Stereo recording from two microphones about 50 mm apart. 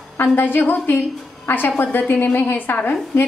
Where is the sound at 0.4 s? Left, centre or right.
Left.